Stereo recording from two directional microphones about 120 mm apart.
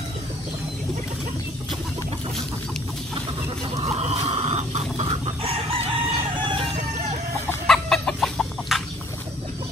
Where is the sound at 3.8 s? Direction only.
60° right (ahead or behind).